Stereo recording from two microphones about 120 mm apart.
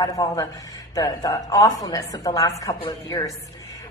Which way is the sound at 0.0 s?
35° left (ahead or behind).